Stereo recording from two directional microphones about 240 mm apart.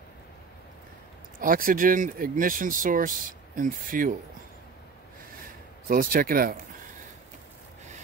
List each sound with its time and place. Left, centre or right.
1.4 s speech: right
5.9 s speech: right